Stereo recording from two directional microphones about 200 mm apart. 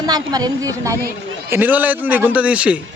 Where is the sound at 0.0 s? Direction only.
20° right (ahead or behind).